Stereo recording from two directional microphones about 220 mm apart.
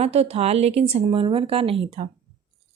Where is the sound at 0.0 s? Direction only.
30° right (ahead or behind).